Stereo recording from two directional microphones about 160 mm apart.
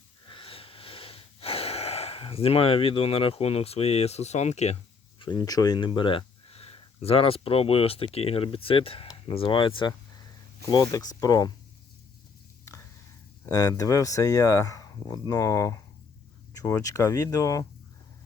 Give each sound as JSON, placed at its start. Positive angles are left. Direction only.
{"t": 0.3, "sound": "wheeze", "side_deg": 35}
{"t": 5.2, "sound": "speech", "side_deg": 25}
{"t": 13.4, "sound": "speech", "side_deg": 20}
{"t": 16.8, "sound": "speech", "side_deg": 20}